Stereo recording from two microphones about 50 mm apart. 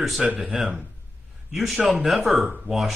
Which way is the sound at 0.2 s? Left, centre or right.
Centre.